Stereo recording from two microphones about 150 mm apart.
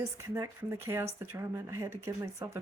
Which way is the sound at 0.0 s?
20° right (ahead or behind).